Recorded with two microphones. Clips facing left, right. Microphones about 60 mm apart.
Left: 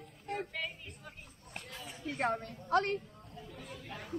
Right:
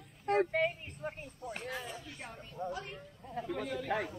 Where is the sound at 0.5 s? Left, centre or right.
Right.